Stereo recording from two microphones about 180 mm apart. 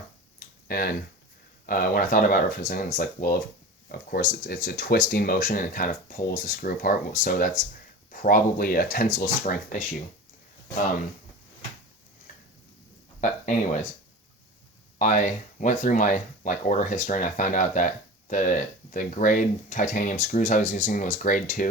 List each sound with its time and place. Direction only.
0.3 s tick-tock: 55° left (ahead or behind)
1.6 s speech: 50° left (ahead or behind)
14.9 s speech: 45° left (ahead or behind)